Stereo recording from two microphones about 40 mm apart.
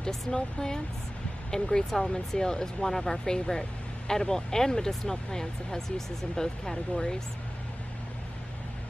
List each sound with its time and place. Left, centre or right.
0.3 s speech: centre